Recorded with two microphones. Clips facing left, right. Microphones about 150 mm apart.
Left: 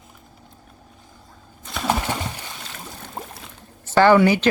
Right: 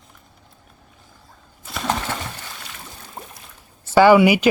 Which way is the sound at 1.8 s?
15° left (ahead or behind).